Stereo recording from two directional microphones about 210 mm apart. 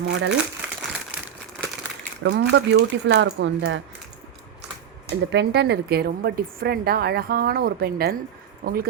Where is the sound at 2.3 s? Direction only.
55° right (ahead or behind).